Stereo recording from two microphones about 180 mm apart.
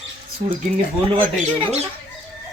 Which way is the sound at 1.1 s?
30° right (ahead or behind).